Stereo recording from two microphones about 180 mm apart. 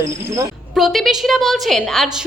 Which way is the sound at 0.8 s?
Centre (ahead or behind).